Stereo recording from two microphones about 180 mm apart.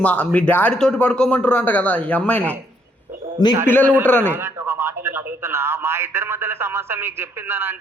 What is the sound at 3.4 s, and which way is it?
Speech, 20° left (ahead or behind).